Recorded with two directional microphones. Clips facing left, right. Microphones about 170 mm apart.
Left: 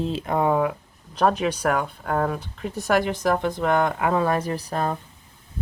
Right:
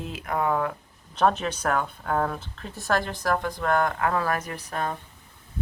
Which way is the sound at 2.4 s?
15° left (ahead or behind).